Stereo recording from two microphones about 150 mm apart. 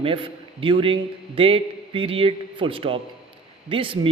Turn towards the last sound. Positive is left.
turn(degrees=-35)  # may be behind; listen again after turning